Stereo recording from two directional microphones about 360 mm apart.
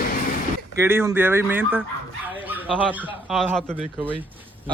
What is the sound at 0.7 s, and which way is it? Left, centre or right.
A man's voice, centre.